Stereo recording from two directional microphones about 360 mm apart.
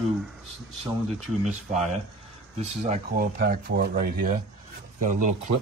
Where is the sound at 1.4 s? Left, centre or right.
Centre.